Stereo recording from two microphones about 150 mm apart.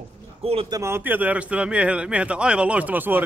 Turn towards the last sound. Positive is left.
turn(degrees=-10)  # may be behind; listen again after turning